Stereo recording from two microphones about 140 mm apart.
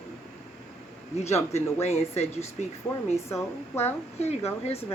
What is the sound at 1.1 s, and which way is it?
Speech, 50° left (ahead or behind).